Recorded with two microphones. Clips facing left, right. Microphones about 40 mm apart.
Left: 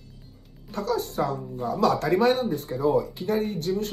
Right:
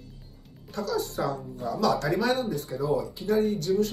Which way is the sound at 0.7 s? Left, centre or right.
Left.